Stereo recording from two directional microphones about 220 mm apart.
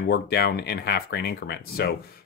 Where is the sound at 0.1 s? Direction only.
50° left (ahead or behind).